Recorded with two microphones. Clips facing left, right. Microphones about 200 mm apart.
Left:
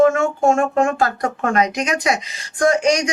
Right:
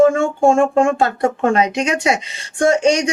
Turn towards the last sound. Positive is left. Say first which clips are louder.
# right 2 dB
turn(degrees=-30)  # may be behind; listen again after turning